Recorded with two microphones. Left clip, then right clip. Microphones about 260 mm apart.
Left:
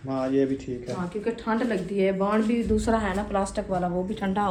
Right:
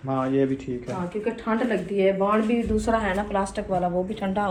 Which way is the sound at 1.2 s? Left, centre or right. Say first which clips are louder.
Right 1 dB; centre.